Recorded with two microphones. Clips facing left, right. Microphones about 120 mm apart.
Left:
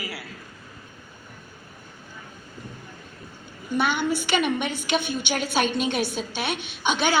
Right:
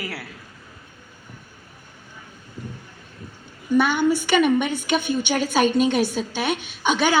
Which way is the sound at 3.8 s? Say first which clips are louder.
Right 4 dB; 50° right (ahead or behind).